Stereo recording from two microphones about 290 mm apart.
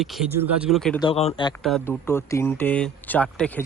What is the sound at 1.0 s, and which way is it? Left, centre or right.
Speech, centre.